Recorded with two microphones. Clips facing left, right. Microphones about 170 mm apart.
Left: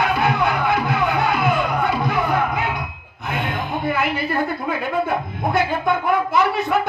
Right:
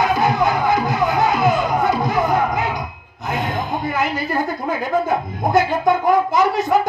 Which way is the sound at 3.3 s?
60° left (ahead or behind).